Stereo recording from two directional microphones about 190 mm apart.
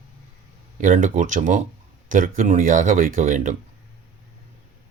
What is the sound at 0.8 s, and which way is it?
Speech, 45° right (ahead or behind).